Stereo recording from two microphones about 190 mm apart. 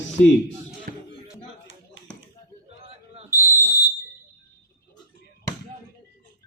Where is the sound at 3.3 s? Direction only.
10° right (ahead or behind).